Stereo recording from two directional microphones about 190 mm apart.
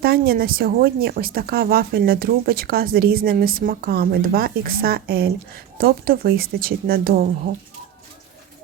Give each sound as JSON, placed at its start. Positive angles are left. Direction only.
{"t": 0.0, "sound": "speech", "side_deg": -55}